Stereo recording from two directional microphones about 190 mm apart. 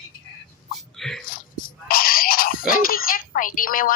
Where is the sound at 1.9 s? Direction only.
50° left (ahead or behind).